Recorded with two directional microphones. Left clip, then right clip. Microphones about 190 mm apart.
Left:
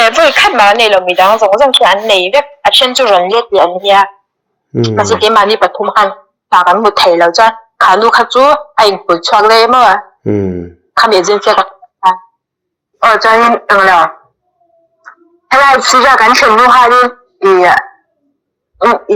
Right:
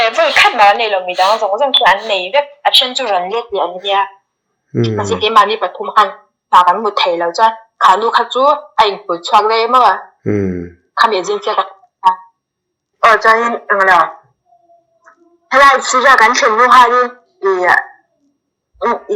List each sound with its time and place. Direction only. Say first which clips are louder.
0.0 s speech: left 4 dB; 45° left (ahead or behind)
10.2 s a sound: right 1 dB; 15° left (ahead or behind)
10.9 s speech: left 5 dB; 45° left (ahead or behind)
18.8 s speech: left 7 dB; 45° left (ahead or behind)